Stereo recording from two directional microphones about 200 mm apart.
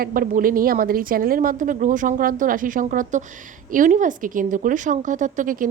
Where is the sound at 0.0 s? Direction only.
45° right (ahead or behind).